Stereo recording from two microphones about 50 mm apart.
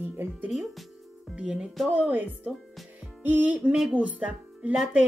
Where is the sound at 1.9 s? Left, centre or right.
Right.